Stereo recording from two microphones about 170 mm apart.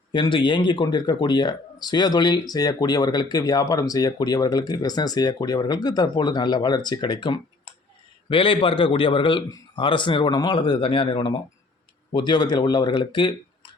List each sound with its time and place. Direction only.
0.1 s speech: 30° left (ahead or behind)